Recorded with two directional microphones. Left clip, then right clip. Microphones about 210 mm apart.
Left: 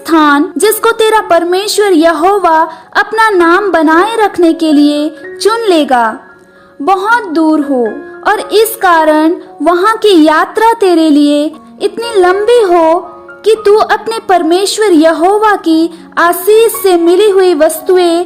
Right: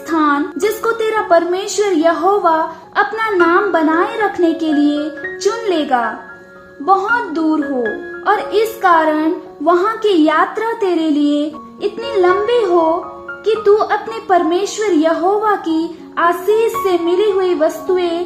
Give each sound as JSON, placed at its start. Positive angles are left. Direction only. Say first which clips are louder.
{"t": 0.1, "sound": "a woman's voice", "louder": "left 8 dB", "side_deg": 50}